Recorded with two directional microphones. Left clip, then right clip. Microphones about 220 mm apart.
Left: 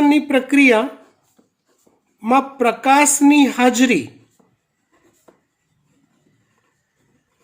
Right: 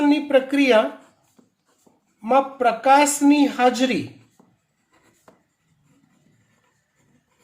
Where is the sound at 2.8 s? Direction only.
50° left (ahead or behind).